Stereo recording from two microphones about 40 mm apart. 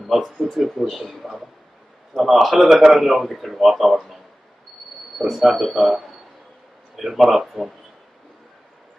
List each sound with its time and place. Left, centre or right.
0.0 s a man's voice: centre
5.2 s a man's voice: centre
7.0 s speech: centre